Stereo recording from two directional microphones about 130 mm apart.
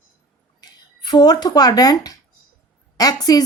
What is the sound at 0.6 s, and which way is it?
A woman's voice, 35° left (ahead or behind).